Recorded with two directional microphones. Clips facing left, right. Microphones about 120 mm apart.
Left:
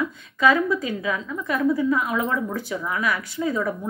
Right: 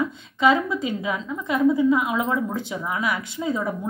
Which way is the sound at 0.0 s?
25° right (ahead or behind).